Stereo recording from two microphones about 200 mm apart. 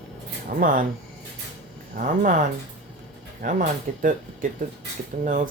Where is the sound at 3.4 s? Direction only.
40° right (ahead or behind).